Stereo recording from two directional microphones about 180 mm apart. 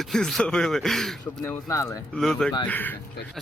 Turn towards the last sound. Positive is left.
turn(degrees=10)  # may be behind; listen again after turning